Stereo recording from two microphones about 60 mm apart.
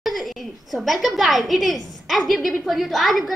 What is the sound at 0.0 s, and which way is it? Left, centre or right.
A woman's voice, centre.